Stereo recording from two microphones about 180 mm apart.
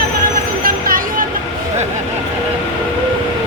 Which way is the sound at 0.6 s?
50° right (ahead or behind).